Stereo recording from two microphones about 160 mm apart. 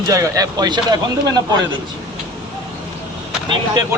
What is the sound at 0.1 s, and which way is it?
Speech, 20° right (ahead or behind).